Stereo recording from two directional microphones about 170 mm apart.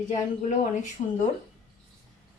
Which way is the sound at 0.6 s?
45° left (ahead or behind).